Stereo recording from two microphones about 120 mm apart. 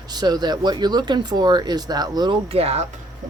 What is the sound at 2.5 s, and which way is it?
Speech, 55° right (ahead or behind).